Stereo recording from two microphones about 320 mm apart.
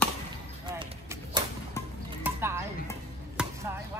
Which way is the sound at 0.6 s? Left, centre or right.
Centre.